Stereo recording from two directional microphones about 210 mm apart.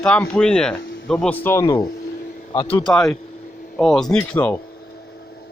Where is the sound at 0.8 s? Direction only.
50° left (ahead or behind).